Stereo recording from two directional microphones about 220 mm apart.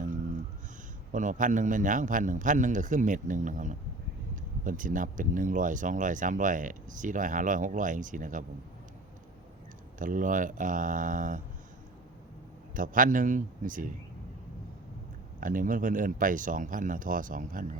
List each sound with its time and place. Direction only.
1.1 s speech: 35° right (ahead or behind)
10.0 s speech: 35° right (ahead or behind)
12.7 s speech: 40° right (ahead or behind)
15.4 s speech: 40° right (ahead or behind)